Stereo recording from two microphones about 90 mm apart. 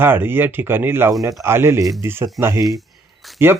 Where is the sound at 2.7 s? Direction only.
Centre (ahead or behind).